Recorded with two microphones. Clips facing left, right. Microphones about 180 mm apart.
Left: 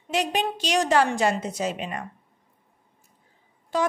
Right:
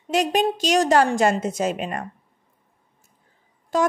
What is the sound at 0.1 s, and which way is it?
A woman's voice, 45° right (ahead or behind).